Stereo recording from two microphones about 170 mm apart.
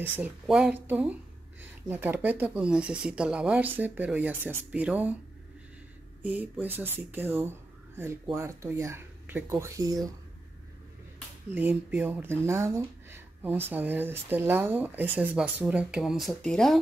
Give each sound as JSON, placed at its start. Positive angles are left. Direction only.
{"t": 0.2, "sound": "speech", "side_deg": -5}
{"t": 6.2, "sound": "speech", "side_deg": -10}
{"t": 11.5, "sound": "speech", "side_deg": -10}